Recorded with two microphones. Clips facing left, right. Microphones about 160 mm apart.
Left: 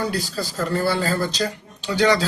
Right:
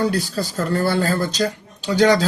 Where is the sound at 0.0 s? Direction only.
45° right (ahead or behind).